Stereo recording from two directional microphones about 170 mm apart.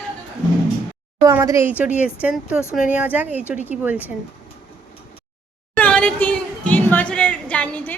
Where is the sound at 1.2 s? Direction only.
20° right (ahead or behind).